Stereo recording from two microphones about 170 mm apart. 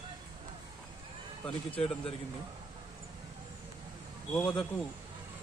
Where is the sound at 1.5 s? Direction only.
35° left (ahead or behind).